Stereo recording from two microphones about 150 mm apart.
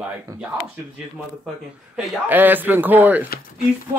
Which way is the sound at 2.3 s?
10° right (ahead or behind).